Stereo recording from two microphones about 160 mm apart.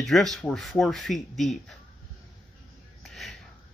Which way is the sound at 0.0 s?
Centre (ahead or behind).